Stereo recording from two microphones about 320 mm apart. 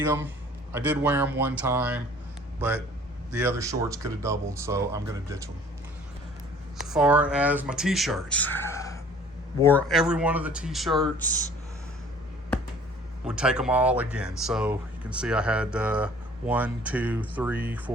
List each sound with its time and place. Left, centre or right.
0.7 s speech: centre
3.3 s speech: centre
6.7 s speech: centre
13.2 s speech: centre